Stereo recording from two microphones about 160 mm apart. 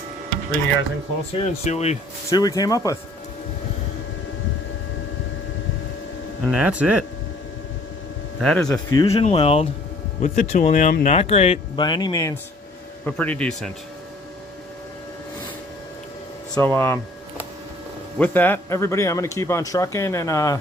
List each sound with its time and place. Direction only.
1.4 s speech: 40° left (ahead or behind)
2.3 s speech: 25° left (ahead or behind)
6.5 s speech: 5° right (ahead or behind)
8.4 s speech: 5° left (ahead or behind)
8.7 s speech: 25° left (ahead or behind)
9.0 s speech: 40° left (ahead or behind)
10.2 s speech: 45° left (ahead or behind)
11.8 s speech: 25° left (ahead or behind)
13.1 s speech: 10° left (ahead or behind)
16.6 s speech: 15° left (ahead or behind)
18.2 s speech: 10° left (ahead or behind)